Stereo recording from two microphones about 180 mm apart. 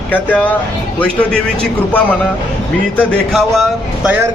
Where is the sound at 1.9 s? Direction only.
10° left (ahead or behind).